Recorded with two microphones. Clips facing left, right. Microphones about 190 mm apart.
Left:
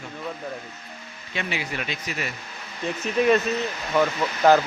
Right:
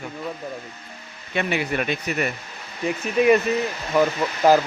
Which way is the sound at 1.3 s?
55° right (ahead or behind).